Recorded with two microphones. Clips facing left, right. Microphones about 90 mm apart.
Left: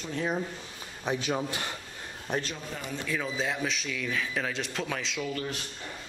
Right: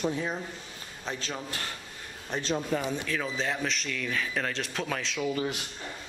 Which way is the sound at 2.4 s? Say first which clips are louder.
Right 8 dB; 25° right (ahead or behind).